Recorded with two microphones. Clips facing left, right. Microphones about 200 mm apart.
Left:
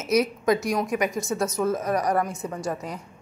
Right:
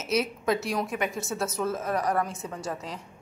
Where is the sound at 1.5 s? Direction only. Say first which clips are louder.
Left 4 dB; 15° left (ahead or behind).